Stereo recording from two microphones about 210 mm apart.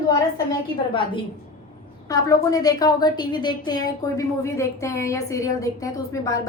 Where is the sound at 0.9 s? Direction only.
25° left (ahead or behind).